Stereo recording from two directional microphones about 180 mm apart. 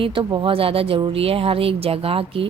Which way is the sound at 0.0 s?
30° right (ahead or behind).